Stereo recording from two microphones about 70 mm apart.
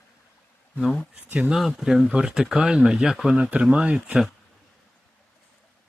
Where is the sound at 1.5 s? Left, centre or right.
Centre.